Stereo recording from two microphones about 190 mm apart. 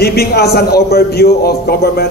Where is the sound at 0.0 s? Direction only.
60° left (ahead or behind).